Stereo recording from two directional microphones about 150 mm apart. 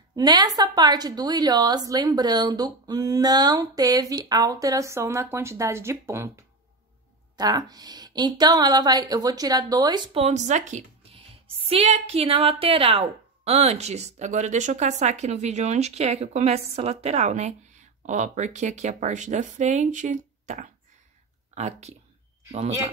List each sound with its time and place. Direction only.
0.1 s a woman's voice: 25° right (ahead or behind)
10.1 s a woman's voice: 50° right (ahead or behind)